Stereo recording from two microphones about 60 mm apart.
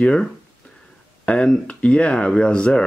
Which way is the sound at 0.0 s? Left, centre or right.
Centre.